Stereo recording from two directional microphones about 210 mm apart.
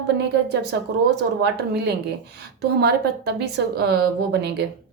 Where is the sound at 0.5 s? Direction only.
50° right (ahead or behind).